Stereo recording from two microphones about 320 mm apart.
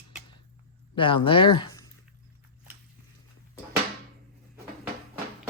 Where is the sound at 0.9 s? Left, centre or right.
Centre.